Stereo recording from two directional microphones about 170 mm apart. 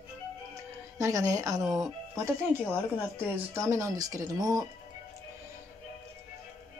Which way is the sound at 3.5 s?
15° right (ahead or behind).